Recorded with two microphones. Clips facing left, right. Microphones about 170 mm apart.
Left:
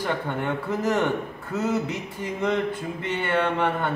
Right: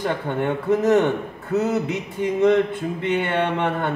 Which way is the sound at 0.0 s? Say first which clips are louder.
Right 4 dB; 20° right (ahead or behind).